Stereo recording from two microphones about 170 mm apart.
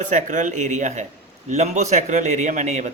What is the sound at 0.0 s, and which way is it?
A man's voice, 45° right (ahead or behind).